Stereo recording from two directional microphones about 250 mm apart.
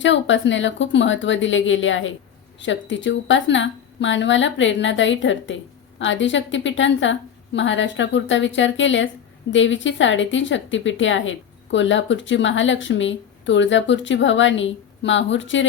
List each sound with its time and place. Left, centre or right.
0.0 s a woman's voice: left